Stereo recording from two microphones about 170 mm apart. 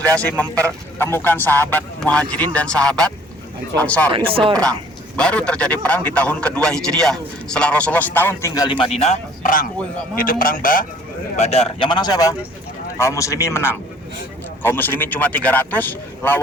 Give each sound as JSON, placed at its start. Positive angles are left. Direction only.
{"t": 0.0, "sound": "a man's voice", "side_deg": 5}
{"t": 4.1, "sound": "speech", "side_deg": -30}
{"t": 5.1, "sound": "a man's voice", "side_deg": 5}
{"t": 11.3, "sound": "a man's voice", "side_deg": 40}